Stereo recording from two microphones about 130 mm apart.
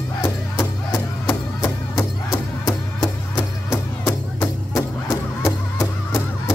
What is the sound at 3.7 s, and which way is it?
Music, 15° left (ahead or behind).